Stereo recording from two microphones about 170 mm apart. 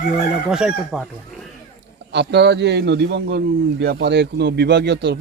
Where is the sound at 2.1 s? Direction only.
90° right.